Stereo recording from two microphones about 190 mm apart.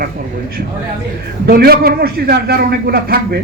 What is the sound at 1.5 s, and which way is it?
A man's voice, 55° right (ahead or behind).